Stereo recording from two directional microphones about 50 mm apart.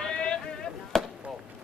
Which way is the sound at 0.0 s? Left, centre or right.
Centre.